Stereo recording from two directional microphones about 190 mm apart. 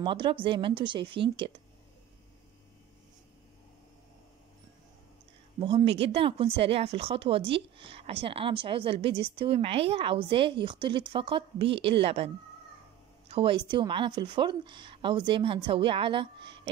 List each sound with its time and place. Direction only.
0.0 s speech: 25° right (ahead or behind)
5.6 s speech: 25° right (ahead or behind)
13.3 s speech: 30° right (ahead or behind)